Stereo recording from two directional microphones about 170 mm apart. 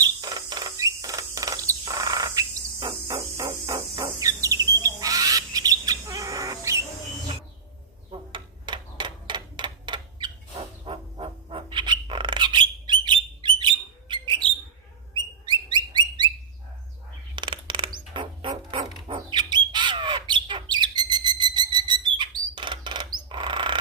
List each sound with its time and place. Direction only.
0.0 s rodents: 25° right (ahead or behind)
1.8 s cricket: 20° right (ahead or behind)
3.2 s bird: 30° right (ahead or behind)
8.1 s typewriter: 30° right (ahead or behind)
15.1 s bird: 25° right (ahead or behind)
17.3 s music: 25° right (ahead or behind)
19.0 s bird: 30° right (ahead or behind)